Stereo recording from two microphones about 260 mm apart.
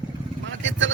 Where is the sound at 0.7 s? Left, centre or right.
Right.